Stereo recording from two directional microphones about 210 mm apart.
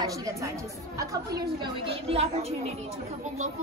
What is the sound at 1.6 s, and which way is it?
A woman's voice, 25° right (ahead or behind).